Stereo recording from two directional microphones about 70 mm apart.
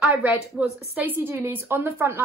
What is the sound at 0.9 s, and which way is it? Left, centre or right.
Speech, right.